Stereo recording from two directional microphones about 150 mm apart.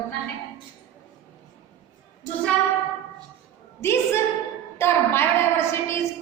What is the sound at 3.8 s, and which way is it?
A woman's voice, 15° left (ahead or behind).